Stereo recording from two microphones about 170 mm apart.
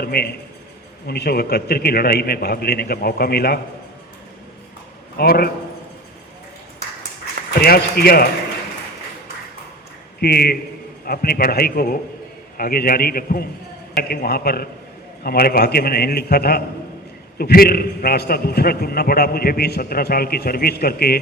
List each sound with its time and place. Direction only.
0.0 s a man's voice: 65° left (ahead or behind)
5.1 s a man's voice: 65° left (ahead or behind)
7.6 s a man's voice: 65° left (ahead or behind)
10.2 s a man's voice: 65° left (ahead or behind)